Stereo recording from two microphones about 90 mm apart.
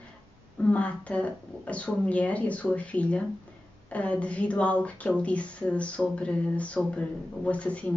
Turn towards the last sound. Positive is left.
turn(degrees=15)  # may be behind; listen again after turning